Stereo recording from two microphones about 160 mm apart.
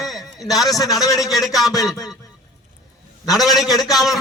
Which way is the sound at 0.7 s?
20° left (ahead or behind).